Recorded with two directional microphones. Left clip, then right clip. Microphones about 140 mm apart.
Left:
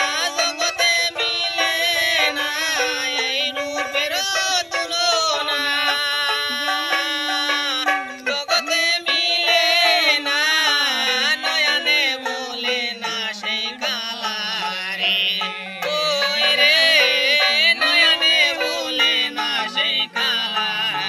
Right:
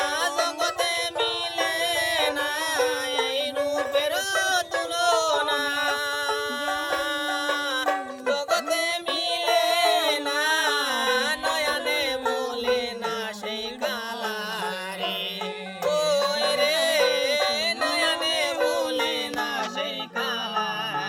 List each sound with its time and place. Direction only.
0.0 s music: 50° right (ahead or behind)
3.9 s a sound: 55° right (ahead or behind)
7.4 s music: 50° right (ahead or behind)
15.0 s music: 55° right (ahead or behind)